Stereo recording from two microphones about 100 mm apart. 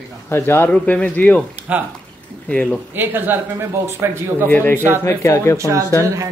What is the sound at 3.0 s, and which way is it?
A man's voice, 20° right (ahead or behind).